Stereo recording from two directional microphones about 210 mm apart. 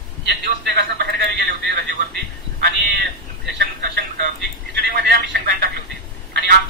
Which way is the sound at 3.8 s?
50° right (ahead or behind).